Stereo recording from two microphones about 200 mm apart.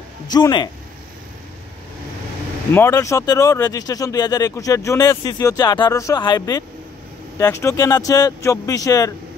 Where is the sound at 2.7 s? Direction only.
10° left (ahead or behind).